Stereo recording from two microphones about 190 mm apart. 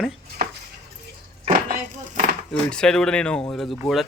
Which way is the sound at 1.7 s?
45° right (ahead or behind).